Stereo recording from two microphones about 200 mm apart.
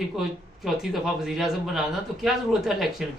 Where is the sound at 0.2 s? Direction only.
Centre (ahead or behind).